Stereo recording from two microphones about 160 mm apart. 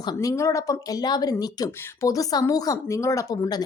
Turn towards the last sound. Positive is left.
turn(degrees=25)  # may be behind; listen again after turning